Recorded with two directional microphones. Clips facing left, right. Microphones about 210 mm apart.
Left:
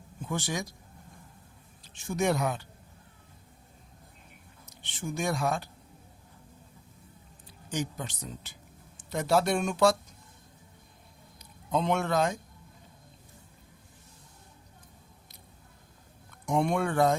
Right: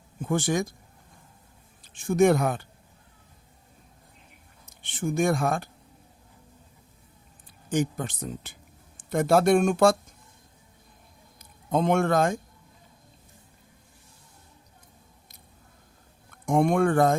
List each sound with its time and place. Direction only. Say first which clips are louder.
0.2 s speech: right 8 dB; 50° right (ahead or behind)
1.8 s speech: right 9 dB; 50° right (ahead or behind)
4.6 s speech: right 7 dB; 50° right (ahead or behind)
7.7 s speech: right 7 dB; 50° right (ahead or behind)
11.3 s a man's voice: right 4 dB; 50° right (ahead or behind)
16.5 s speech: right 6 dB; 50° right (ahead or behind)